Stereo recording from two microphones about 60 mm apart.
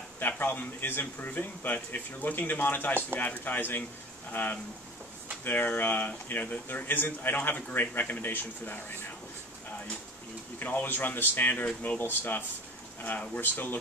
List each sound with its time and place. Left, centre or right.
0.3 s speech: left
10.6 s speech: left